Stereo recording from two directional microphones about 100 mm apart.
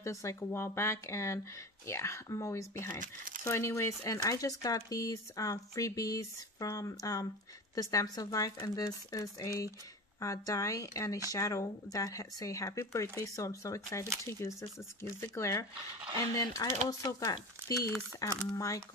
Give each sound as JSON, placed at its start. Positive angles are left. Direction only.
{"t": 0.0, "sound": "speech", "side_deg": 30}